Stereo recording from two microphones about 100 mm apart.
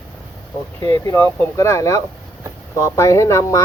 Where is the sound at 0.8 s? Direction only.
30° left (ahead or behind).